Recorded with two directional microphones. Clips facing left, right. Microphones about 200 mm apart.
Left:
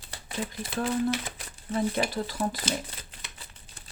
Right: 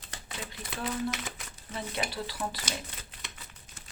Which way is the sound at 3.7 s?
30° left (ahead or behind).